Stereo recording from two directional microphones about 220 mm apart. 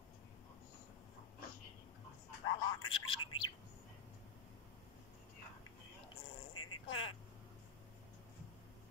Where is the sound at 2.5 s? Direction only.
25° left (ahead or behind).